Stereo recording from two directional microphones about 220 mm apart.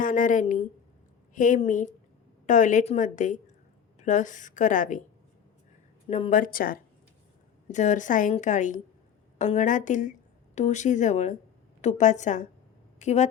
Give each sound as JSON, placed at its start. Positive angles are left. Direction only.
{"t": 0.0, "sound": "a woman's voice", "side_deg": 35}
{"t": 6.1, "sound": "a woman's voice", "side_deg": 30}